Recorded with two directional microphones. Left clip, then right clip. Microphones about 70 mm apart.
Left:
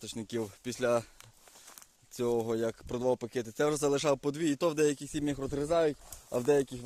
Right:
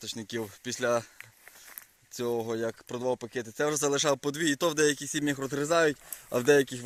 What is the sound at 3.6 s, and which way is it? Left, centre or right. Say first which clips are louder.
Speech: right 1 dB; left.